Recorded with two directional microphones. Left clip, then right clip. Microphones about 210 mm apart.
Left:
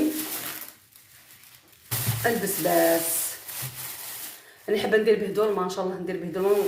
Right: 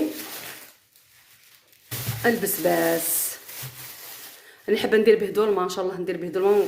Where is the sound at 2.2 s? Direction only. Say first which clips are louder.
Right 3 dB; 50° right (ahead or behind).